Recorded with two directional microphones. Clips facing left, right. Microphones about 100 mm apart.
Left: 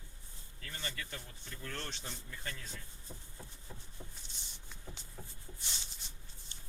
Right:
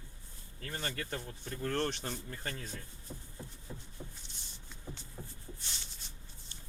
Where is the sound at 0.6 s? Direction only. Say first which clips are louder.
Right 5 dB; 45° right (ahead or behind).